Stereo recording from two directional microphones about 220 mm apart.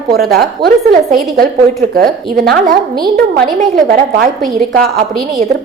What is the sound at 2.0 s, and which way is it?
A woman's voice, 40° right (ahead or behind).